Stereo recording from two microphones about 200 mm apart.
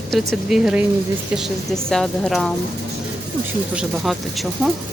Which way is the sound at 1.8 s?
Centre (ahead or behind).